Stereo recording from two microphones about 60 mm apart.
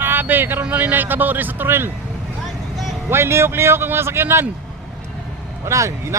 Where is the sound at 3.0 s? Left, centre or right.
Right.